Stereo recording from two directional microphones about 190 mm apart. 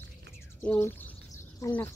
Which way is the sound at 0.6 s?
10° left (ahead or behind).